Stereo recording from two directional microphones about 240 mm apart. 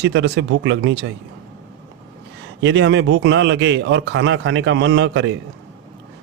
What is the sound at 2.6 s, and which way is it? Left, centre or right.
Speech, right.